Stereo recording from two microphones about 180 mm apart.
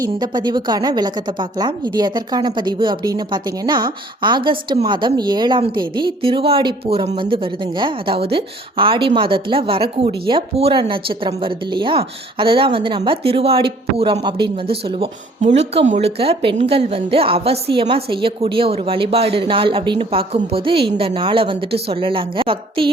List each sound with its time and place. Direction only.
0.0 s a woman's voice: 25° right (ahead or behind)